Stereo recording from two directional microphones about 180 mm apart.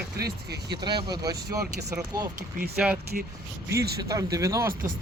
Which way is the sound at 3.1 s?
50° right (ahead or behind).